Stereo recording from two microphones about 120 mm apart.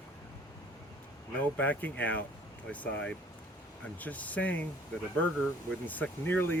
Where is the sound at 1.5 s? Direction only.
10° left (ahead or behind).